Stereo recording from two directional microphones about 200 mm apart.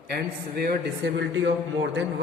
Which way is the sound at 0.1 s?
50° right (ahead or behind).